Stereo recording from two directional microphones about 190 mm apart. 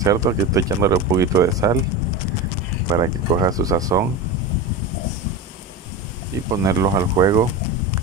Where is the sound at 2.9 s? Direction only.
20° right (ahead or behind).